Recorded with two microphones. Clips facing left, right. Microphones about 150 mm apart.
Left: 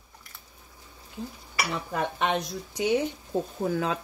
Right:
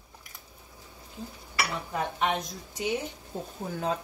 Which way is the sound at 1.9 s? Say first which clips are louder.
Left 2 dB; 85° left.